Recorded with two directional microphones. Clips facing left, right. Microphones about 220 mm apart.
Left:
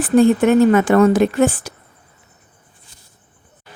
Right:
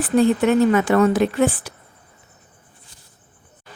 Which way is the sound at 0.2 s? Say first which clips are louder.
Left 4 dB; 50° left (ahead or behind).